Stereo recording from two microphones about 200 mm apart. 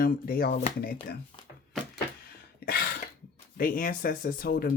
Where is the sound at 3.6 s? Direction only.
45° left (ahead or behind).